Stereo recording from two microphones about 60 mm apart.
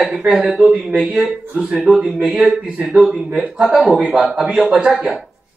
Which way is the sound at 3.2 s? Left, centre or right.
Right.